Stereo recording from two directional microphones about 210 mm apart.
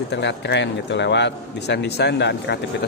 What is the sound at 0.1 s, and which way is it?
A man's voice, 55° left (ahead or behind).